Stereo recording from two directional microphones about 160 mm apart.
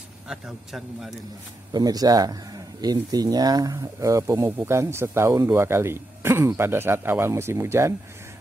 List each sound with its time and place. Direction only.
0.3 s a man's voice: centre (ahead or behind)
1.7 s speech: 25° right (ahead or behind)